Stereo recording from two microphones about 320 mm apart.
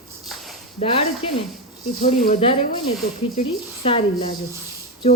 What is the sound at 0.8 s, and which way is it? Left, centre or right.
Speech, centre.